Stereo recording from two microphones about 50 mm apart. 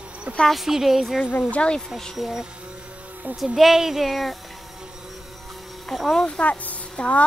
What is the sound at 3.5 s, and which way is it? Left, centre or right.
Speech, centre.